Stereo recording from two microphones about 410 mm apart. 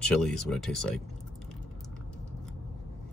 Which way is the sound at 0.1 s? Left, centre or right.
Centre.